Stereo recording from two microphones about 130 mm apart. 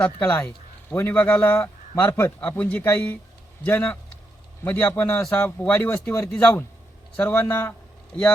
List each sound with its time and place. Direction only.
0.0 s a man's voice: 10° left (ahead or behind)